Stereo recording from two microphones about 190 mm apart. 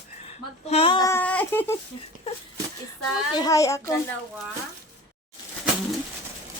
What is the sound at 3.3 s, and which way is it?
Child singing, 20° left (ahead or behind).